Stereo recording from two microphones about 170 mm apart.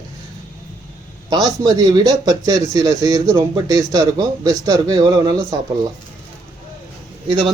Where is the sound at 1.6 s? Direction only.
20° right (ahead or behind).